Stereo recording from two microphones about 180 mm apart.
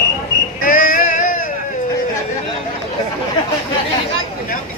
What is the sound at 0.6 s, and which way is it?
Child singing, 50° left (ahead or behind).